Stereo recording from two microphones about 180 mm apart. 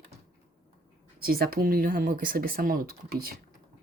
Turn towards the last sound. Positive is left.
turn(degrees=-55)  # may be behind; listen again after turning